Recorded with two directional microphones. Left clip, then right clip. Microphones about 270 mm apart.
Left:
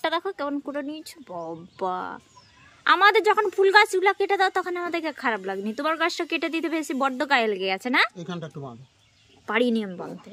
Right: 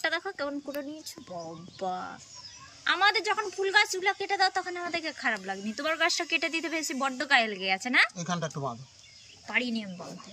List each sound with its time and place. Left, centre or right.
0.0 s a woman's voice: centre
9.5 s a woman's voice: centre